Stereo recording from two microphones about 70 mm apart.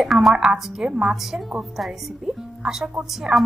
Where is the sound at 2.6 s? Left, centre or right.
Centre.